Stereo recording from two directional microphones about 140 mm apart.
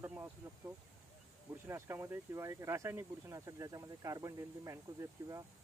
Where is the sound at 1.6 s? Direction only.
20° right (ahead or behind).